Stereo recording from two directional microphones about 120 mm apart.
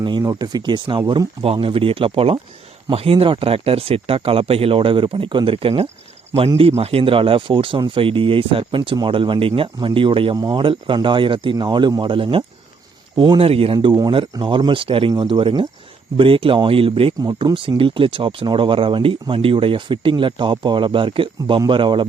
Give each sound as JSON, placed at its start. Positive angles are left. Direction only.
{"t": 0.2, "sound": "speech", "side_deg": -30}
{"t": 10.3, "sound": "speech", "side_deg": -30}
{"t": 10.6, "sound": "speech", "side_deg": -45}